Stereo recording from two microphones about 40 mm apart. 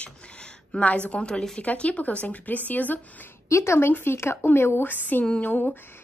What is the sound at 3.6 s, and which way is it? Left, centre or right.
Speech, left.